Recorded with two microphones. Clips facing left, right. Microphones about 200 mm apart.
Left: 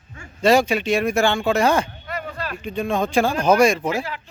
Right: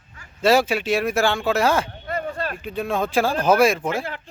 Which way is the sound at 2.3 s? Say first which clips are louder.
Right 2 dB; 50° right (ahead or behind).